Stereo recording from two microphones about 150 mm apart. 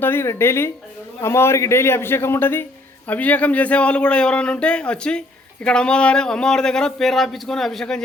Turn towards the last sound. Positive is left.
turn(degrees=5)  # may be behind; listen again after turning